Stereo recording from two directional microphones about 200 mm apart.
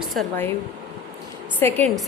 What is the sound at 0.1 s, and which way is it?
Speech, centre (ahead or behind).